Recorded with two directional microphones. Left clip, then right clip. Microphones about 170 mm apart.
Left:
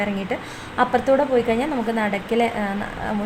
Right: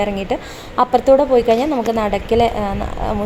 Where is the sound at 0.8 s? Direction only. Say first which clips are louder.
Right 6 dB; 20° right (ahead or behind).